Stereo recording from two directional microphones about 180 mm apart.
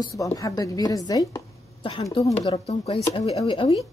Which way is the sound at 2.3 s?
25° left (ahead or behind).